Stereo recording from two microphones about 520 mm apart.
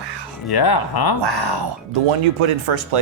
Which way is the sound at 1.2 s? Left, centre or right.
Right.